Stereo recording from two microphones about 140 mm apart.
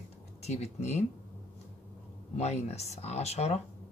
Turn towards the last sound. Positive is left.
turn(degrees=50)  # may be behind; listen again after turning